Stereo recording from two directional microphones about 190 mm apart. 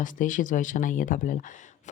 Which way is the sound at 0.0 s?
45° left (ahead or behind).